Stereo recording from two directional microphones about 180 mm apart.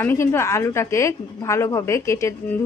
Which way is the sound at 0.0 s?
15° left (ahead or behind).